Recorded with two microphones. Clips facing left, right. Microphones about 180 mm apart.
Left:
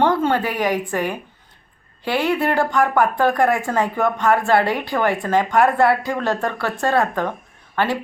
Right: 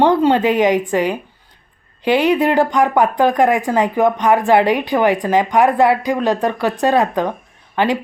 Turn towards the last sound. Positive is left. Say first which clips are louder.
# right 4 dB
turn(degrees=-15)  # may be behind; listen again after turning